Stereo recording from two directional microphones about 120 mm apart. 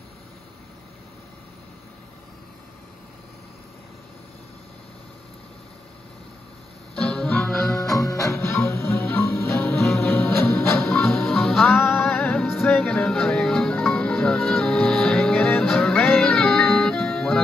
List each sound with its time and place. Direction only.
7.0 s music: 5° left (ahead or behind)
7.9 s music: 25° left (ahead or behind)
9.8 s music: centre (ahead or behind)
10.1 s music: 15° left (ahead or behind)
10.9 s music: 5° left (ahead or behind)